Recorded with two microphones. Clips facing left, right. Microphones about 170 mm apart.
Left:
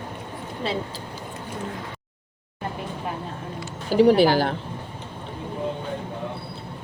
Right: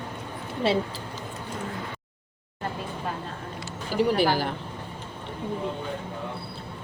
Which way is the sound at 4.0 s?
75° left (ahead or behind).